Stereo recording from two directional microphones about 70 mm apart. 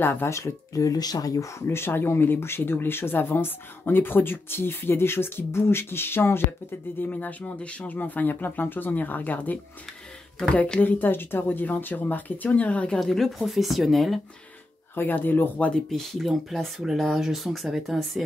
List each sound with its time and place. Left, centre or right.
0.0 s speech: left
0.4 s speech: left
1.7 s speech: left
7.0 s speech: left
13.0 s speech: centre
15.0 s speech: left
15.7 s speech: centre